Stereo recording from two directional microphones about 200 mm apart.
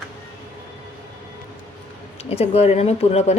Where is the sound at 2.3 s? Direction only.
30° left (ahead or behind).